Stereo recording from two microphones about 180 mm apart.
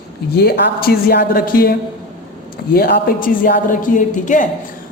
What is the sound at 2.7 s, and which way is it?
A woman's voice, 60° left (ahead or behind).